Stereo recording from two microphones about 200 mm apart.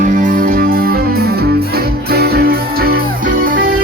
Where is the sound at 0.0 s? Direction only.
40° right (ahead or behind).